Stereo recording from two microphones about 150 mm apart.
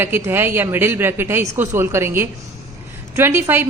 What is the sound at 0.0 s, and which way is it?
A woman's voice, 15° right (ahead or behind).